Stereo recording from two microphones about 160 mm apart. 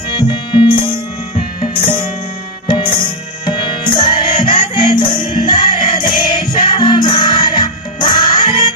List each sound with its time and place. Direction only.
0.1 s music: 30° left (ahead or behind)